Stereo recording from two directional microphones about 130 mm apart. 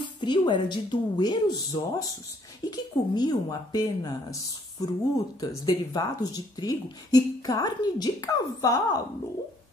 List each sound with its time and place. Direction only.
0.0 s a woman's voice: 35° left (ahead or behind)